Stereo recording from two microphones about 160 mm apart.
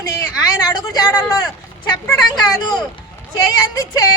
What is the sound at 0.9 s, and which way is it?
Speech, 25° left (ahead or behind).